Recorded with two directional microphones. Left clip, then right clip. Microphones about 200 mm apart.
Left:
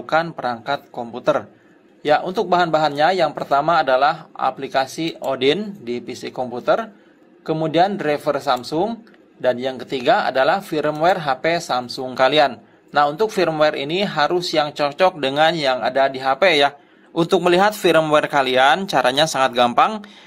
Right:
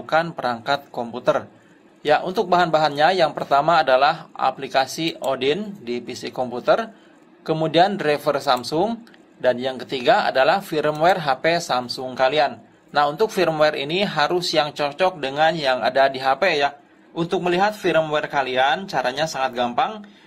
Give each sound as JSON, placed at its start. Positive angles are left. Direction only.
{"t": 0.0, "sound": "a man's voice", "side_deg": 10}
{"t": 13.0, "sound": "speech", "side_deg": 10}